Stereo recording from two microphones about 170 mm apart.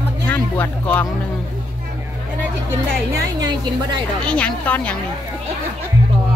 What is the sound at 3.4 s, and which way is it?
Speech, 25° right (ahead or behind).